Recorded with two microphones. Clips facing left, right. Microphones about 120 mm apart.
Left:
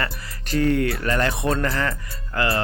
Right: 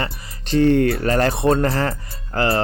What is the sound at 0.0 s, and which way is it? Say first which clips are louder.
Speech: right 1 dB; 25° right (ahead or behind).